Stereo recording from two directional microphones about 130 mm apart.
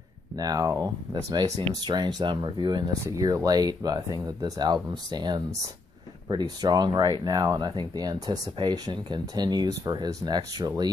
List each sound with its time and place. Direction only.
0.4 s speech: 25° right (ahead or behind)